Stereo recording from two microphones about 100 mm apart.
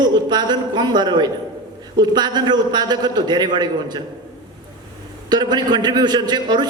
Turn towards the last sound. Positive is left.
turn(degrees=-45)  # may be behind; listen again after turning